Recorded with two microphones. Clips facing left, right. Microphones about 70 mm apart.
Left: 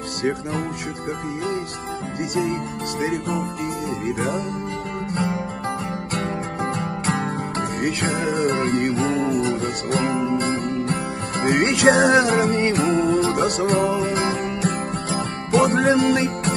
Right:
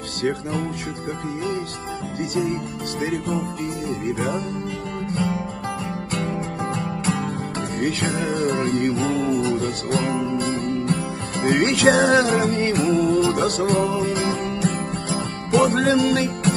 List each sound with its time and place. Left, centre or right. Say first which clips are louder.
5.1 s music: even; left
13.6 s music: left 1 dB; left